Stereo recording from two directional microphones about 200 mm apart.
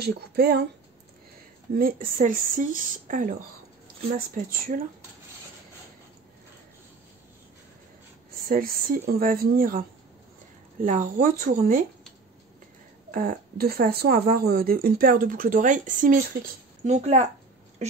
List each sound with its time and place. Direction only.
0.0 s speech: 50° right (ahead or behind)
1.7 s speech: 45° right (ahead or behind)
4.4 s speech: 45° right (ahead or behind)
8.5 s speech: 45° right (ahead or behind)
13.1 s speech: 45° right (ahead or behind)